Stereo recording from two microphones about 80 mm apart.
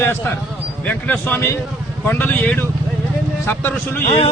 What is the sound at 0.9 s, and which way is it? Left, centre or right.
Speech, centre.